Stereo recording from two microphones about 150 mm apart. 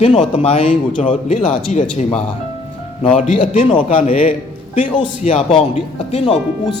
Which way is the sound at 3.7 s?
35° left (ahead or behind).